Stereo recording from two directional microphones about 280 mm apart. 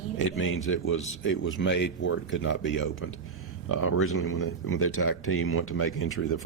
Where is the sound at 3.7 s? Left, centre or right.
Left.